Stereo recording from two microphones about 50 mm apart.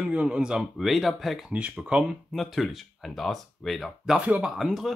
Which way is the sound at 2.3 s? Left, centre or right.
Centre.